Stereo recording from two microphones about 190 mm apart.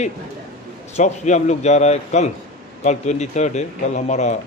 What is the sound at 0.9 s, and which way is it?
A man's voice, 40° left (ahead or behind).